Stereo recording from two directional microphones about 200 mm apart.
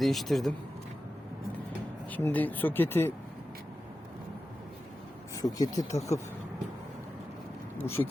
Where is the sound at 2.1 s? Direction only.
10° left (ahead or behind).